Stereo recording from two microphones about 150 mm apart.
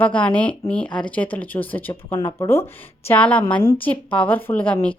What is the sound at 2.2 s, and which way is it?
Speech, 30° left (ahead or behind).